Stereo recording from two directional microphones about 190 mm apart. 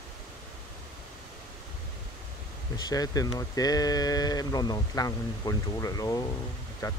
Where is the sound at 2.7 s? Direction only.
20° left (ahead or behind).